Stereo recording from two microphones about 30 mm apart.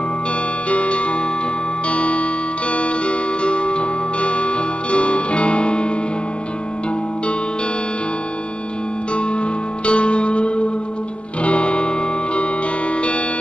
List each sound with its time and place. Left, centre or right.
0.7 s music: left
9.1 s music: left